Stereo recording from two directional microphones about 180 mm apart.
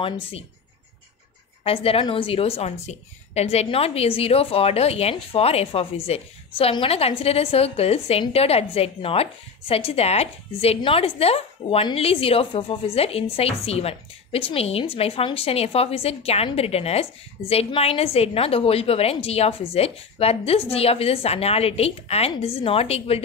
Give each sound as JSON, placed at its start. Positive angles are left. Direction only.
{"t": 1.6, "sound": "a woman's voice", "side_deg": 30}